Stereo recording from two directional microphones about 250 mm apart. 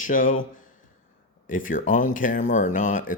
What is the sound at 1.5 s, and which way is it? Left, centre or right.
Speech, left.